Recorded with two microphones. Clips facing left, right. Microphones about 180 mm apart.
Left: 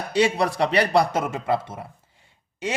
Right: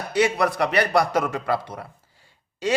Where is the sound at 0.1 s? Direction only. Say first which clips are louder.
Even; 30° left (ahead or behind).